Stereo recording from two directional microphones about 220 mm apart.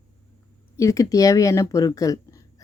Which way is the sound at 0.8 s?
15° left (ahead or behind).